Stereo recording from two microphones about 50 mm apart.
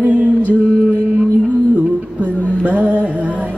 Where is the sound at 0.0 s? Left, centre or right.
Right.